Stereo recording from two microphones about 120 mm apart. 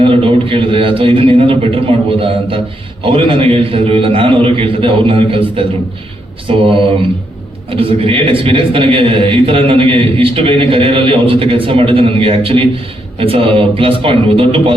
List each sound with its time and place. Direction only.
0.0 s a man's voice: 50° right (ahead or behind)
6.5 s mantra: 55° right (ahead or behind)
7.7 s a man's voice: 50° right (ahead or behind)